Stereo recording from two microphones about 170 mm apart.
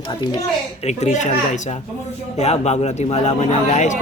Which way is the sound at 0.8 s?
40° left (ahead or behind).